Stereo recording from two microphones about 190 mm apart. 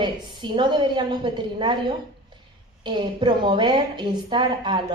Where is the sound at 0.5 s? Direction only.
25° right (ahead or behind).